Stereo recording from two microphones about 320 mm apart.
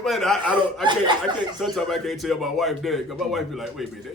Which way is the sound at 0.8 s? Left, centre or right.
Centre.